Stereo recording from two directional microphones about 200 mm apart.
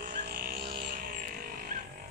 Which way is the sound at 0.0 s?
50° right (ahead or behind).